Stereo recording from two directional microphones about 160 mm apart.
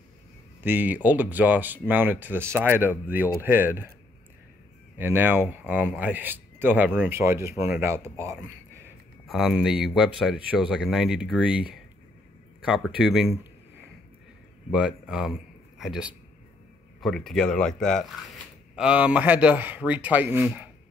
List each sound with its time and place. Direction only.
0.7 s speech: 10° right (ahead or behind)
4.9 s speech: 15° right (ahead or behind)
9.3 s speech: centre (ahead or behind)
14.7 s speech: 5° right (ahead or behind)
18.8 s speech: 10° right (ahead or behind)